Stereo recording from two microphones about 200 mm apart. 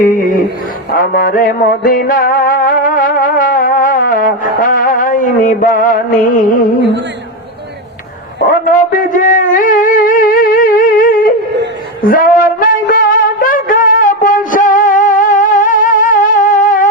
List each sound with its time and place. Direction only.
0.0 s music: 45° left (ahead or behind)
8.4 s a sound: 40° left (ahead or behind)
12.0 s music: 45° left (ahead or behind)